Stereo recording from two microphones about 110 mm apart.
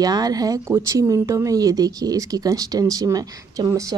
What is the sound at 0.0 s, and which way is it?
Speech, 35° right (ahead or behind).